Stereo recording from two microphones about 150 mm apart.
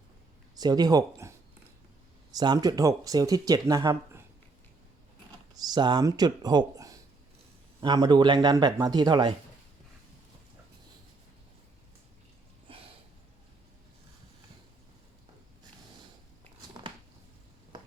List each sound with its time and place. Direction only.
0.5 s speech: 25° right (ahead or behind)
2.3 s speech: 25° right (ahead or behind)
5.5 s speech: 25° right (ahead or behind)
12.7 s sniff: 40° right (ahead or behind)